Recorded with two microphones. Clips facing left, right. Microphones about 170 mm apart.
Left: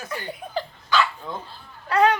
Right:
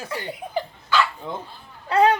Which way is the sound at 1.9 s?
25° right (ahead or behind).